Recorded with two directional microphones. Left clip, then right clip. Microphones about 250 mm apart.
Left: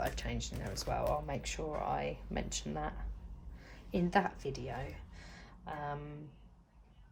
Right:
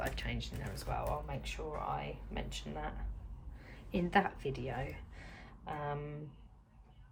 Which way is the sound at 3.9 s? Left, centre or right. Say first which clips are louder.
Even; centre.